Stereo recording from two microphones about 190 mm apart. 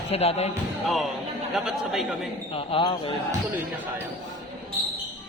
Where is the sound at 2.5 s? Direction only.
25° left (ahead or behind).